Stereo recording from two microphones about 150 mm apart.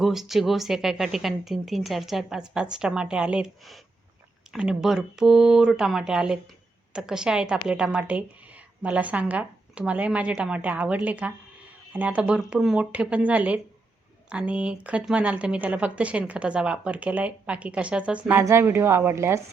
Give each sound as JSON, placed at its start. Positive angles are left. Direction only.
{"t": 0.0, "sound": "a woman's voice", "side_deg": 0}
{"t": 18.3, "sound": "a woman's voice", "side_deg": -20}